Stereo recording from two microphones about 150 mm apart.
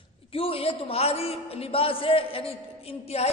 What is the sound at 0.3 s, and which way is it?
A man's voice, 40° left (ahead or behind).